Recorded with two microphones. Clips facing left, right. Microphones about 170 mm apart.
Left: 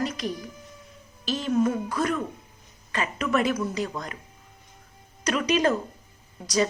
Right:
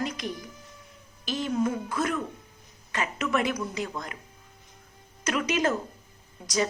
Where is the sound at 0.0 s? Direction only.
15° right (ahead or behind).